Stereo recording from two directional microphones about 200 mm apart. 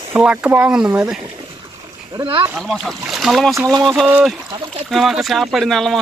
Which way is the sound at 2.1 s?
25° right (ahead or behind).